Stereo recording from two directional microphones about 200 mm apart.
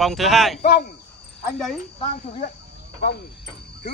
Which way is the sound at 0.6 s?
35° left (ahead or behind).